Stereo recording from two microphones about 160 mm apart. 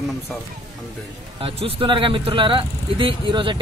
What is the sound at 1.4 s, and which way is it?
Speech, 35° right (ahead or behind).